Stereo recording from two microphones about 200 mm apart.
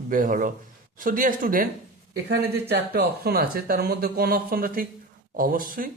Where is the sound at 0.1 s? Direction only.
45° right (ahead or behind).